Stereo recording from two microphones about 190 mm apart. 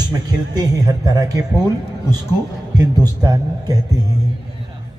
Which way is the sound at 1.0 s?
20° right (ahead or behind).